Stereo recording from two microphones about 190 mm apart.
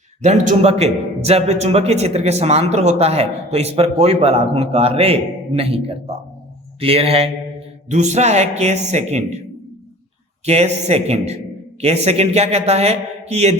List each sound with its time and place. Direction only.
0.2 s a man's voice: 40° right (ahead or behind)
10.4 s a man's voice: 35° right (ahead or behind)